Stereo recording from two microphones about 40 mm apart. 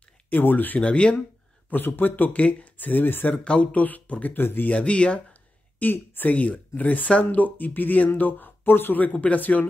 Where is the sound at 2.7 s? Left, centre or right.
Left.